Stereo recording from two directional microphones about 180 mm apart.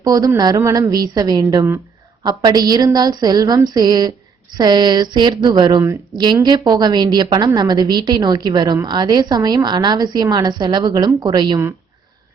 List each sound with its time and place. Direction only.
0.0 s speech: 20° right (ahead or behind)